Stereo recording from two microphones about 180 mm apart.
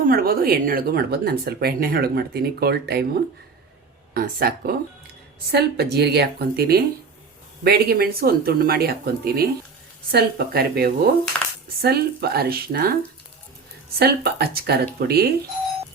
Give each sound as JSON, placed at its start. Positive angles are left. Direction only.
{"t": 0.0, "sound": "speech", "side_deg": -55}
{"t": 4.1, "sound": "speech", "side_deg": -55}
{"t": 14.0, "sound": "speech", "side_deg": -60}